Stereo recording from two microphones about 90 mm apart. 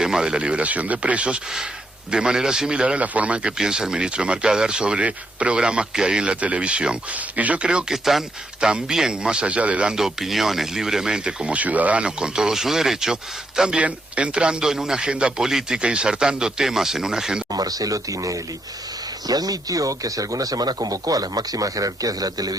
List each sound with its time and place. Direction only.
0.0 s a man's voice: 5° right (ahead or behind)
17.5 s speech: 45° right (ahead or behind)